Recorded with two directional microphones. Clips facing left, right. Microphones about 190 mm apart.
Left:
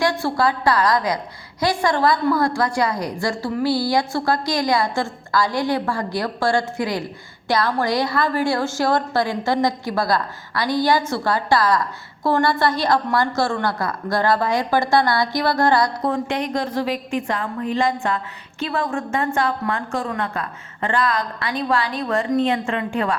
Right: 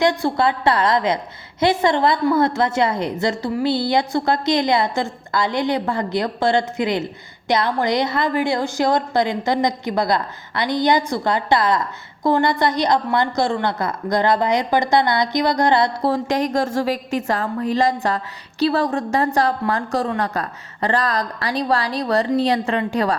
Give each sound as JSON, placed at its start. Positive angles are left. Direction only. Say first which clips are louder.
{"t": 0.0, "sound": "a woman's voice", "louder": "right 2 dB", "side_deg": -20}